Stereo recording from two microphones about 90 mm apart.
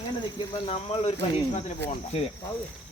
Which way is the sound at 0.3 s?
90° left.